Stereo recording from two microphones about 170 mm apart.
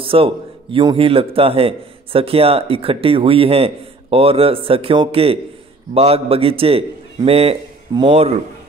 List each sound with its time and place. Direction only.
0.0 s a man's voice: 30° right (ahead or behind)